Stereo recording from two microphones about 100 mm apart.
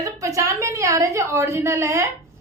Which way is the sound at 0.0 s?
35° right (ahead or behind).